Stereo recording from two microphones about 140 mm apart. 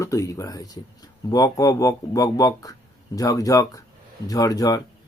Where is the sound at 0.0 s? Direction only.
20° left (ahead or behind).